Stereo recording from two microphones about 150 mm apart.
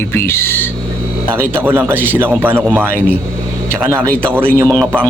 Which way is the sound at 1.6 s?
15° right (ahead or behind).